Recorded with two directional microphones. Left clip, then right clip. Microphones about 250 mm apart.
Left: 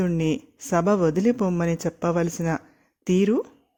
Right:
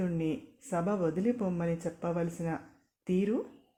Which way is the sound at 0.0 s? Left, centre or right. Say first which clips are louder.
Left 9 dB; left.